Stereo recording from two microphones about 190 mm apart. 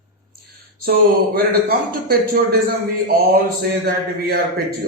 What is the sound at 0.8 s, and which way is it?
Speech, 50° right (ahead or behind).